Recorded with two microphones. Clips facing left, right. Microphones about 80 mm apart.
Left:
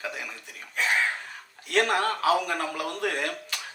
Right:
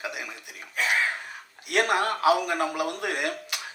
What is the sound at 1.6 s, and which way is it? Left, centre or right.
Speech, centre.